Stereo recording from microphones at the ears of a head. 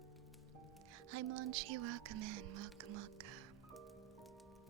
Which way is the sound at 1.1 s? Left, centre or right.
Right.